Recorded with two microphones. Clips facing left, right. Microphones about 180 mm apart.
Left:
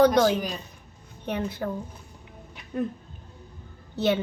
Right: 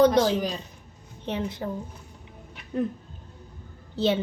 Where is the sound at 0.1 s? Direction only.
25° right (ahead or behind).